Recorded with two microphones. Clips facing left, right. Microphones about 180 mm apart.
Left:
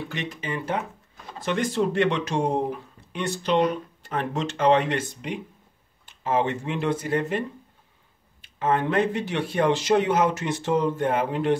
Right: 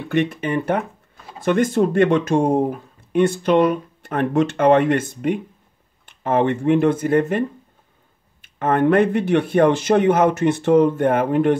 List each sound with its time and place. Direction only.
0.1 s speech: 60° right (ahead or behind)